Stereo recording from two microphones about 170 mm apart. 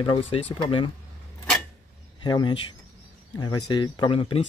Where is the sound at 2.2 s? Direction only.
25° left (ahead or behind).